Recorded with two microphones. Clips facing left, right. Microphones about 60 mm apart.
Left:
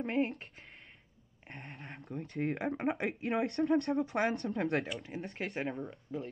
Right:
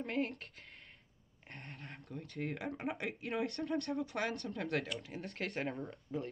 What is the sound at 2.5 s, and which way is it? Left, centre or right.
Speech, left.